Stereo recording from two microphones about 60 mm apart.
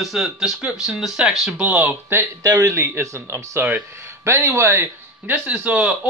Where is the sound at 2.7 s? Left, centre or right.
Right.